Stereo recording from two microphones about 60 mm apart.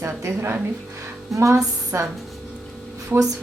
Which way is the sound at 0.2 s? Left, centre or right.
Right.